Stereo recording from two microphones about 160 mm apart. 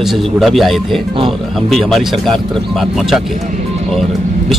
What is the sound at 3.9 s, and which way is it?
Music, centre (ahead or behind).